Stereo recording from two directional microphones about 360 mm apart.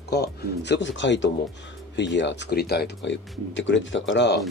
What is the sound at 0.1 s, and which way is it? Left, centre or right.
Speech, left.